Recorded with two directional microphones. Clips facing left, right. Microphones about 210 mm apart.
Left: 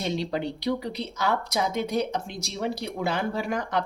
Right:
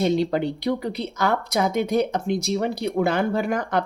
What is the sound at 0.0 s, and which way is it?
Speech, 55° right (ahead or behind).